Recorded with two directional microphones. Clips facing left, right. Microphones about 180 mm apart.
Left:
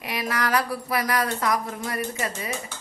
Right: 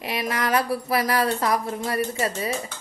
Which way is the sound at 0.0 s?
25° right (ahead or behind).